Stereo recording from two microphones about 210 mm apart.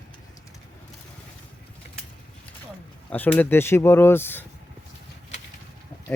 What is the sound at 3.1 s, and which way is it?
Speech, 10° left (ahead or behind).